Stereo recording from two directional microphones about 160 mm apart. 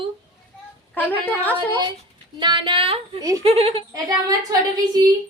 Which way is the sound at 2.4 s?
30° right (ahead or behind).